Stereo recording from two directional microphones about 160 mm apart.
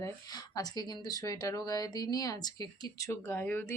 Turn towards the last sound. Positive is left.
turn(degrees=15)  # may be behind; listen again after turning